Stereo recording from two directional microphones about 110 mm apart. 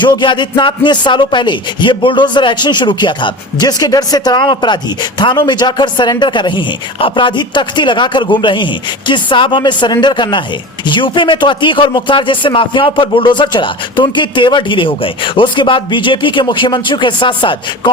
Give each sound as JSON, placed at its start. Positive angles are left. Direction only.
{"t": 0.0, "sound": "speech", "side_deg": 45}